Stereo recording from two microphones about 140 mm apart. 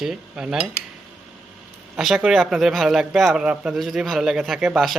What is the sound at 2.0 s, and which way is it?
Speech, centre (ahead or behind).